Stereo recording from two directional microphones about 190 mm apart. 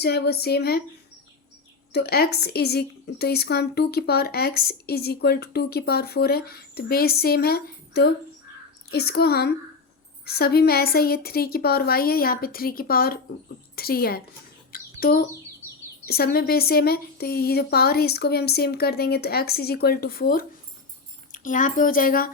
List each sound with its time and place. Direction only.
0.0 s a woman's voice: 60° left (ahead or behind)
1.9 s a woman's voice: 55° left (ahead or behind)
14.7 s bird: 50° left (ahead or behind)
16.0 s a woman's voice: 55° left (ahead or behind)